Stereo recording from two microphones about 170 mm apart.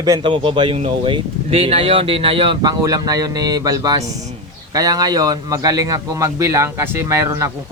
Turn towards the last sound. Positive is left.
turn(degrees=-15)  # may be behind; listen again after turning